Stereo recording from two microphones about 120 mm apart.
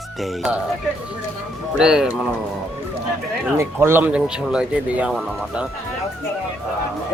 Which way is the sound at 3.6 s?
20° right (ahead or behind).